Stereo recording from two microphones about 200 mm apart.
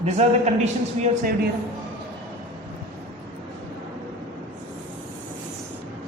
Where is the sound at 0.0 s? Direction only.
35° right (ahead or behind).